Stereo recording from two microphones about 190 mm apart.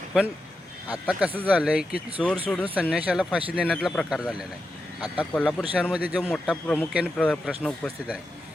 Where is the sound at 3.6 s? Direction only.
5° left (ahead or behind).